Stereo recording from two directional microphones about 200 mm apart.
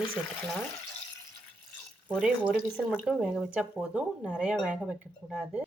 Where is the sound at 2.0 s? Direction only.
5° right (ahead or behind).